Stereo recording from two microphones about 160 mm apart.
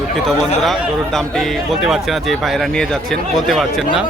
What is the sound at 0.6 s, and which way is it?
Speech, centre (ahead or behind).